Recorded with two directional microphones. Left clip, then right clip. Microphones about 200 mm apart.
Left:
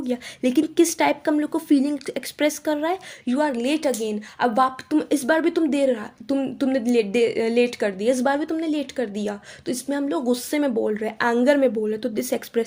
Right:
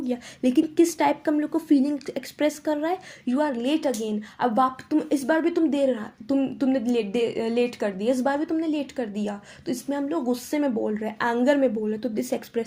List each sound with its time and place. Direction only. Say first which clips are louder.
0.0 s speech: left 2 dB; 30° left (ahead or behind)